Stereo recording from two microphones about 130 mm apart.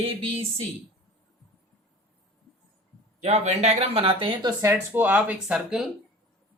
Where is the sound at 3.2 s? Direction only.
55° right (ahead or behind); by 4.5 s 40° right (ahead or behind).